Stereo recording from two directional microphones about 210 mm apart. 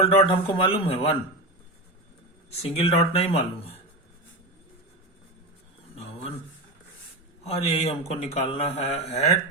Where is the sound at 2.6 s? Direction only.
30° left (ahead or behind).